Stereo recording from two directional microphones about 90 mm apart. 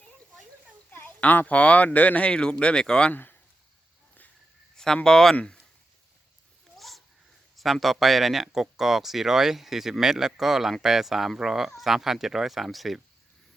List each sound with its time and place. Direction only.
0.9 s speech: 20° left (ahead or behind)
3.1 s speech: 20° left (ahead or behind)
5.0 s speech: 5° left (ahead or behind)
6.7 s a sound: centre (ahead or behind)
7.5 s speech: centre (ahead or behind)